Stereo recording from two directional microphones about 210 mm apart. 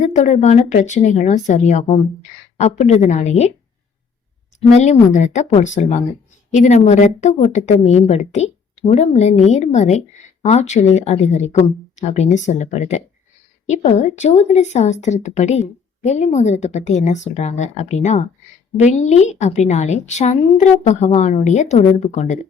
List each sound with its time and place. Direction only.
0.0 s speech: 35° left (ahead or behind)
4.7 s speech: 35° left (ahead or behind)